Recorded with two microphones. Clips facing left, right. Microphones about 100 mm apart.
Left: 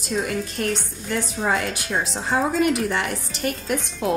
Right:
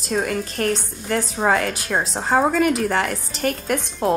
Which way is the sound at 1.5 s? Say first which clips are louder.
Right 2 dB; 50° right (ahead or behind).